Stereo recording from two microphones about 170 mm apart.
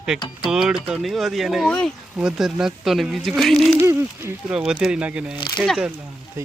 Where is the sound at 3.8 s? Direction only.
10° right (ahead or behind).